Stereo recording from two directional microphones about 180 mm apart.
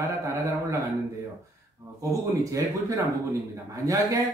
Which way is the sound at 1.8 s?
20° right (ahead or behind).